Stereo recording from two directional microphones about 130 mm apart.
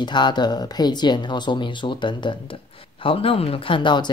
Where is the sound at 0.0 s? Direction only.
35° left (ahead or behind).